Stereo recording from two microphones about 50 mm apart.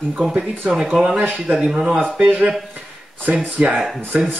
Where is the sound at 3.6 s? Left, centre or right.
Right.